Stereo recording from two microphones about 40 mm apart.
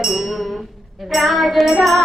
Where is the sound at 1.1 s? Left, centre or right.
Centre.